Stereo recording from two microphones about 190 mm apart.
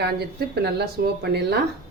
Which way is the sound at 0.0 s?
55° right (ahead or behind).